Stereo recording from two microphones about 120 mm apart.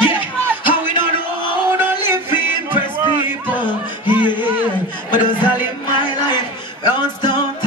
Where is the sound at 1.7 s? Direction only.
20° right (ahead or behind).